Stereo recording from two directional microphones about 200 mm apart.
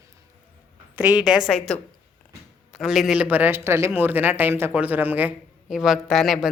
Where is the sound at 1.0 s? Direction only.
5° right (ahead or behind).